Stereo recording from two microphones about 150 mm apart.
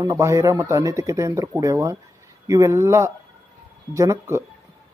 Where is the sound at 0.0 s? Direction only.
20° right (ahead or behind).